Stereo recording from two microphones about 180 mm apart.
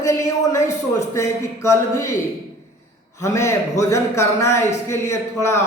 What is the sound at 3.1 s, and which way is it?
A man's voice, 15° left (ahead or behind).